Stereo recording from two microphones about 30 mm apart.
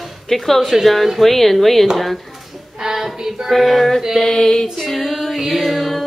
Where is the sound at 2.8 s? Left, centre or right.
Centre.